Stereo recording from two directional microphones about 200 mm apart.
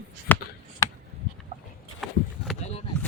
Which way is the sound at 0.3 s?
10° left (ahead or behind).